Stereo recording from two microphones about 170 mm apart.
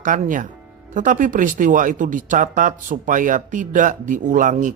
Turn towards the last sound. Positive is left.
turn(degrees=-50)  # may be behind; listen again after turning